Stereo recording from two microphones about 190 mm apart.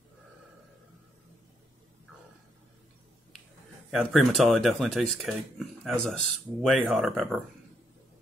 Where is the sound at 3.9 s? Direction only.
Centre (ahead or behind).